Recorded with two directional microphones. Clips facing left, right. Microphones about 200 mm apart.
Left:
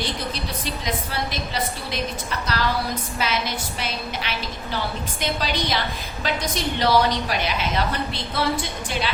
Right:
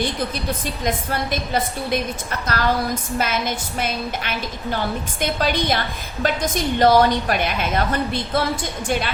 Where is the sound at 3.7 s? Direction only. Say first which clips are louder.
Right 4 dB; 50° right (ahead or behind).